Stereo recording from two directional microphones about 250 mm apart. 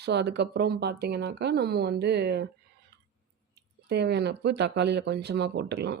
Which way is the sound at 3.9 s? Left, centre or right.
Right.